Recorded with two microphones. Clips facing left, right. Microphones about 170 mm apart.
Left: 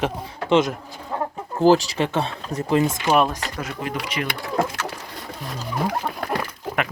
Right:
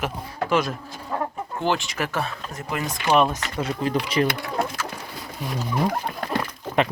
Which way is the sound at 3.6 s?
30° right (ahead or behind).